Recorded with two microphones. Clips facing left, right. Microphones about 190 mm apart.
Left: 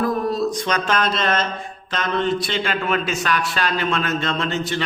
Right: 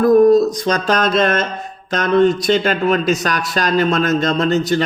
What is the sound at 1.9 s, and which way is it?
Speech, 45° right (ahead or behind).